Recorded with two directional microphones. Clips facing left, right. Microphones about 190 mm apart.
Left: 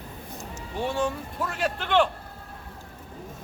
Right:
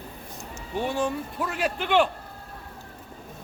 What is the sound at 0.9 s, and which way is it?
A man's voice, 5° right (ahead or behind).